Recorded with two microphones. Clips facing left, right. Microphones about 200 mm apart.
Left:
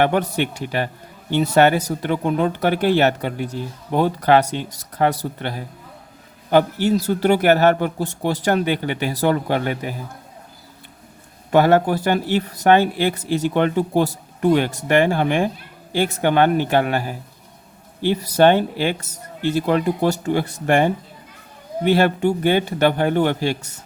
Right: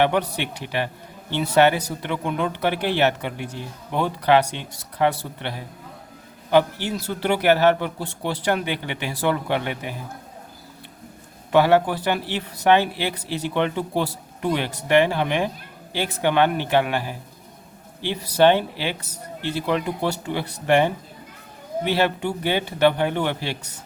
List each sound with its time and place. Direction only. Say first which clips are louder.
0.0 s speech: left 3 dB; 45° left (ahead or behind)
11.5 s speech: left 2 dB; 45° left (ahead or behind)